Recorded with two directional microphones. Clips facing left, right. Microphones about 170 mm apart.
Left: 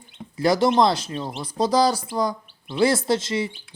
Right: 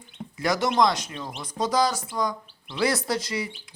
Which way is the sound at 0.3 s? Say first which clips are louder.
Left 5 dB; 30° left (ahead or behind).